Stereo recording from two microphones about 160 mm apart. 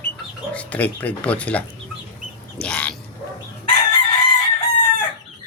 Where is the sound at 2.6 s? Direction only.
5° left (ahead or behind).